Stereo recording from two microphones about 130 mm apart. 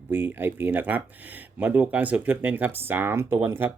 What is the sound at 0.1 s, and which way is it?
Speech, 15° right (ahead or behind).